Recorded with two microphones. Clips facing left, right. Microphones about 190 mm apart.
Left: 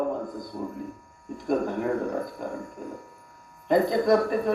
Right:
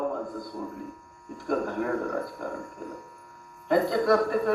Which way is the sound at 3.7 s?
20° left (ahead or behind).